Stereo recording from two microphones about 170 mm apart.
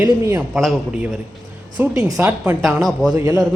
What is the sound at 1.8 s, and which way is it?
Speech, 10° right (ahead or behind).